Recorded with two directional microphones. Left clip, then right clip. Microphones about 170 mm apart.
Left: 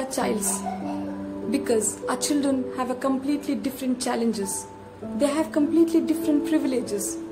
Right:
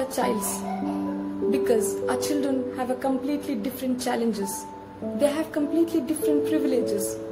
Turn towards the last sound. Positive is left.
turn(degrees=15)  # may be behind; listen again after turning